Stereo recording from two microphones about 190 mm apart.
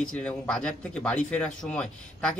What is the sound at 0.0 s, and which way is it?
Speech, 5° left (ahead or behind).